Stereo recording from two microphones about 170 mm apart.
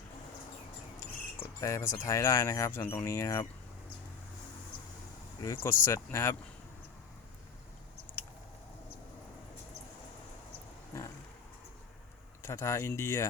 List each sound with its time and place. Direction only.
0.9 s speech: 15° left (ahead or behind)
5.4 s speech: 15° left (ahead or behind)
12.4 s speech: 15° left (ahead or behind)